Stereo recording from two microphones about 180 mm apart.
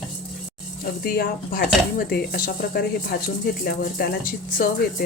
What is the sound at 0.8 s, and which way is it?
A woman's voice, 55° left (ahead or behind).